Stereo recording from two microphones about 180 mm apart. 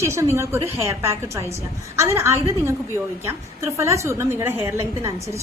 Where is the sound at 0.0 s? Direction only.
15° right (ahead or behind).